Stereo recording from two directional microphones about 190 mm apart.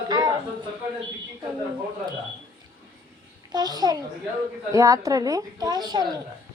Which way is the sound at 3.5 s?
20° right (ahead or behind).